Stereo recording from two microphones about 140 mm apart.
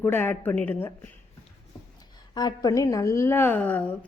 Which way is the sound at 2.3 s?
30° left (ahead or behind).